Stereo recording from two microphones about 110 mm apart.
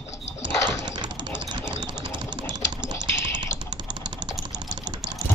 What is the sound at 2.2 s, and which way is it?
Typing, 40° right (ahead or behind).